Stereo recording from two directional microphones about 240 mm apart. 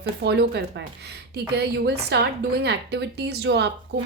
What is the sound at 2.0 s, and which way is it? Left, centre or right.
A woman's voice, right.